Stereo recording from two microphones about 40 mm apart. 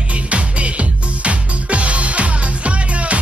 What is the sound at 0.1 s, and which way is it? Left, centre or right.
Music, right.